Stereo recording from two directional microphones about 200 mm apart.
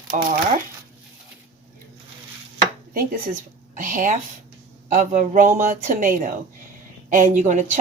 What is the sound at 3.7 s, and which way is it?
Speech, 40° right (ahead or behind).